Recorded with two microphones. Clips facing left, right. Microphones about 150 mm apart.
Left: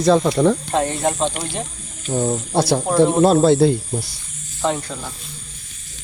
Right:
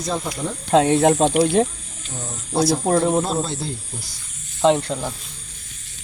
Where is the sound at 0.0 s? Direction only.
85° left.